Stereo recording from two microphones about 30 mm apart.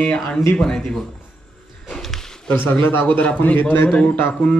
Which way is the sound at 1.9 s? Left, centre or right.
Centre.